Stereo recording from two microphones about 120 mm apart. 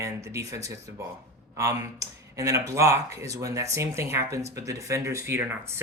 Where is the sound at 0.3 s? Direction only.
25° right (ahead or behind).